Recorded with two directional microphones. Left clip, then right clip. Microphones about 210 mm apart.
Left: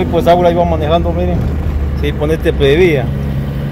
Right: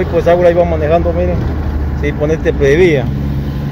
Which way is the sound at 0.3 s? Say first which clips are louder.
Right 1 dB; 20° left (ahead or behind).